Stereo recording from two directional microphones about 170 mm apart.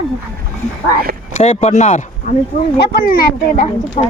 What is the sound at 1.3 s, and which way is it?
Speech, 40° left (ahead or behind).